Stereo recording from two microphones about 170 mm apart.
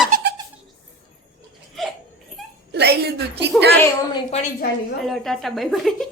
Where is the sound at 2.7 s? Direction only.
70° right (ahead or behind).